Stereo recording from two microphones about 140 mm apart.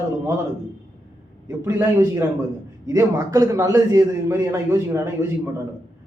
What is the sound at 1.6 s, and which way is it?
A man's voice, 20° right (ahead or behind).